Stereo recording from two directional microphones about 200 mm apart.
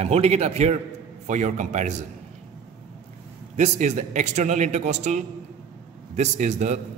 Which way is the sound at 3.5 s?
35° right (ahead or behind).